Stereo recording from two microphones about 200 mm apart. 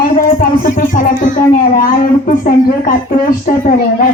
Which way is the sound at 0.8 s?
40° left (ahead or behind).